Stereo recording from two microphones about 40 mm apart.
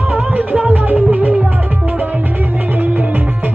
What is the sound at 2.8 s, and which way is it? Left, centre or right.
Music, right.